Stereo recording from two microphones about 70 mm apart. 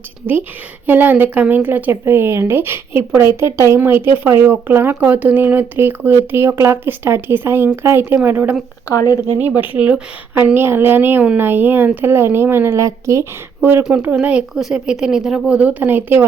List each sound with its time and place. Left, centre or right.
0.9 s speech: right
8.9 s speech: left
9.6 s a woman's voice: centre
10.3 s speech: right
13.6 s speech: right
14.1 s a woman's voice: centre
14.5 s a woman's voice: centre; by 16.2 s right